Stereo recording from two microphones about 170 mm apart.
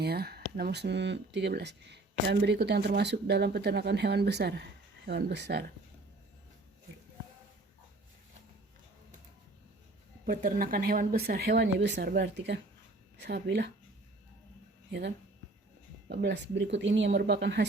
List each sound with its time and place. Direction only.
0.0 s speech: 70° right (ahead or behind)
5.0 s speech: 90° right
10.2 s speech: 55° right (ahead or behind); by 13.7 s 85° right
14.8 s speech: 85° right